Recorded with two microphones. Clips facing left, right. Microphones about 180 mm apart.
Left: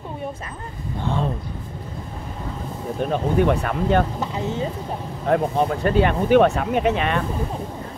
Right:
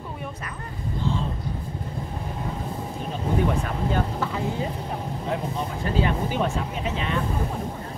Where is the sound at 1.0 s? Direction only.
60° left (ahead or behind).